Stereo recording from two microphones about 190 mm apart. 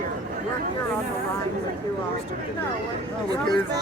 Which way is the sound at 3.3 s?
20° right (ahead or behind).